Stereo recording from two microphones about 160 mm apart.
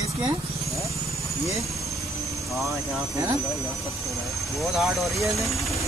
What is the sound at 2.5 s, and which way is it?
Speech, centre (ahead or behind).